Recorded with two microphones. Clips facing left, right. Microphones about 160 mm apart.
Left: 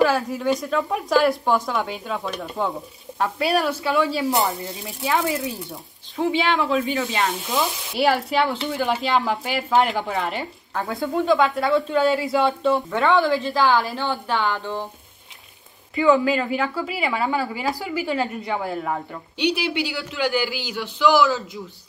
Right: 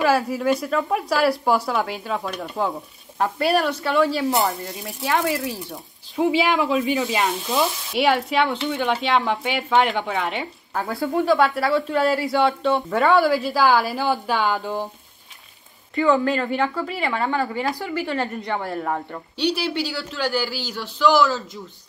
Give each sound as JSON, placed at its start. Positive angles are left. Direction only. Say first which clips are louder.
{"t": 0.1, "sound": "a woman's voice", "louder": "right 2 dB", "side_deg": -5}
{"t": 15.9, "sound": "speech", "louder": "left 1 dB", "side_deg": 0}
{"t": 19.5, "sound": "speech", "louder": "even", "side_deg": 15}
{"t": 20.6, "sound": "speech", "louder": "left 2 dB", "side_deg": -40}